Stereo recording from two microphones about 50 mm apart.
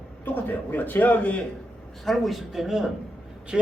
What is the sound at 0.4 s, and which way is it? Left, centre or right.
Speech, left.